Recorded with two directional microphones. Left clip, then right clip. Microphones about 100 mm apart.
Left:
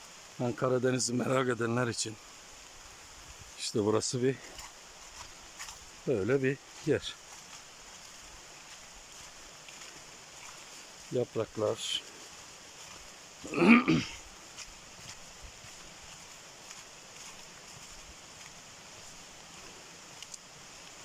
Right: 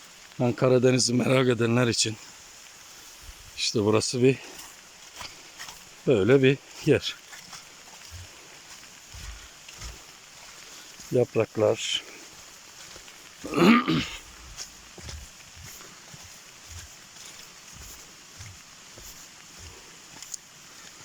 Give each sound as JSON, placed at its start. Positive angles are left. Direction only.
{"t": 0.3, "sound": "speech", "side_deg": -10}
{"t": 3.6, "sound": "a sound", "side_deg": 10}
{"t": 3.8, "sound": "speech", "side_deg": -5}
{"t": 6.1, "sound": "speech", "side_deg": -15}
{"t": 11.7, "sound": "speech", "side_deg": 0}
{"t": 13.5, "sound": "a sound", "side_deg": 10}